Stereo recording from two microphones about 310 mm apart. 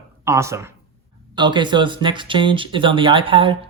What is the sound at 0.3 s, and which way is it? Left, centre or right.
Speech, centre.